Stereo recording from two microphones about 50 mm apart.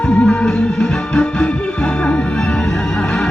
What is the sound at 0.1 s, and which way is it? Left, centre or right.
Music, centre.